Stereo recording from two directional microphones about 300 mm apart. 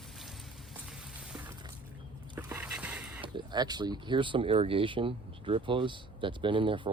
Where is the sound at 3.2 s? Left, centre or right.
Centre.